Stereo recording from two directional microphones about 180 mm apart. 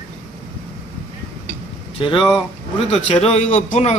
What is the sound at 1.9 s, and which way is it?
A man's voice, 30° left (ahead or behind).